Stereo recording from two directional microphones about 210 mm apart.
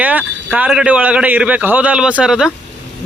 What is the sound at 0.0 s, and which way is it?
A man's voice, 5° right (ahead or behind).